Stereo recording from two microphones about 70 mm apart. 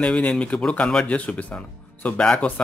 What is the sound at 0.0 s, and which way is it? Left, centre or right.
Speech, centre.